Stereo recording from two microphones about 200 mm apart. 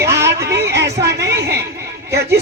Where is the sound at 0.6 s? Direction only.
55° right (ahead or behind).